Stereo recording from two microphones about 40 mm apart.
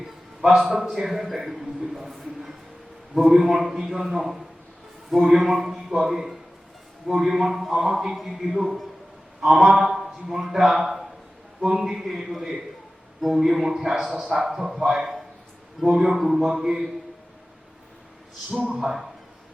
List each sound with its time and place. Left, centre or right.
0.8 s a man's voice: centre
18.5 s speech: right
18.8 s a man's voice: centre